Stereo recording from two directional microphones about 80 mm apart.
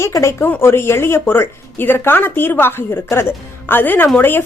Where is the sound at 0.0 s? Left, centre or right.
Left.